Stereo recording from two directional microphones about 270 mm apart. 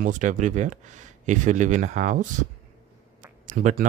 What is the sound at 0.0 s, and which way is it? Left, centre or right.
Speech, right.